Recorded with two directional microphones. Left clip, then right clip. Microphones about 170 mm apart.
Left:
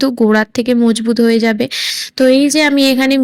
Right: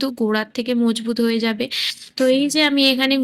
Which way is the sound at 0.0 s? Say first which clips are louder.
Left 9 dB; 35° left (ahead or behind).